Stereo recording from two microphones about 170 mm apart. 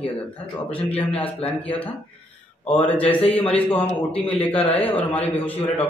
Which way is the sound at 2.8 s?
10° left (ahead or behind).